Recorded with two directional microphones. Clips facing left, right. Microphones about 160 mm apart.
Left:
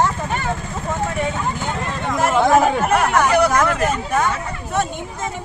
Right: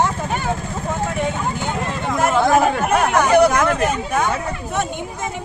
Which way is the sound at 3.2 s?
20° right (ahead or behind).